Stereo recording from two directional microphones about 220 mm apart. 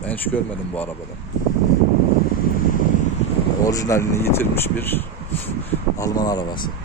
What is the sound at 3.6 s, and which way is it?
Speech, 15° left (ahead or behind).